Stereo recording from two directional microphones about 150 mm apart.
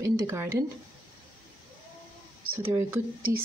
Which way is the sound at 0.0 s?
20° right (ahead or behind).